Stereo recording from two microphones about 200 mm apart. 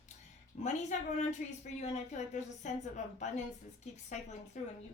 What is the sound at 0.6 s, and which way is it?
A woman's voice, 35° left (ahead or behind).